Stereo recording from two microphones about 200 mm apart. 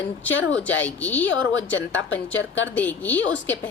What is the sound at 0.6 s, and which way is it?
Speech, 10° left (ahead or behind).